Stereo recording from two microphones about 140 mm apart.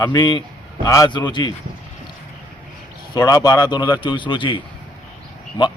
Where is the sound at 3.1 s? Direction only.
25° left (ahead or behind).